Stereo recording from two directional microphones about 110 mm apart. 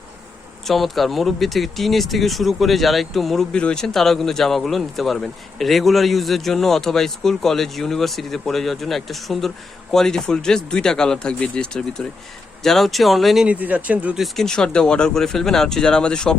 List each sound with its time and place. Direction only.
0.7 s speech: centre (ahead or behind)
13.5 s speech: 15° right (ahead or behind)
14.2 s speech: 5° left (ahead or behind)